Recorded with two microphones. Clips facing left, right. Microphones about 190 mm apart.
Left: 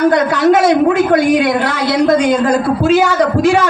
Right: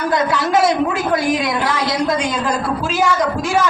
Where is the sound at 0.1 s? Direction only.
65° left (ahead or behind).